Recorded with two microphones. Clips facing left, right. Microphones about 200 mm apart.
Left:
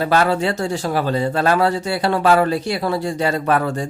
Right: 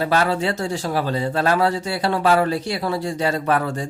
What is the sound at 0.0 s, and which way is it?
Speech, 55° left (ahead or behind).